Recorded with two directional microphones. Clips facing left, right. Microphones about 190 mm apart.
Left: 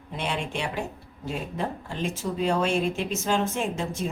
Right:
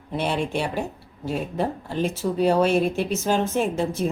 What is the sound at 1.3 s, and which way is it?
Speech, 40° right (ahead or behind).